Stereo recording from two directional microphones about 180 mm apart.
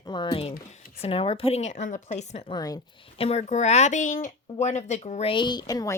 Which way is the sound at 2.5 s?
20° left (ahead or behind).